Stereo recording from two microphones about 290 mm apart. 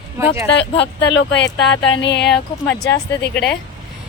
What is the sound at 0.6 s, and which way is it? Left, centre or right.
Speech, left.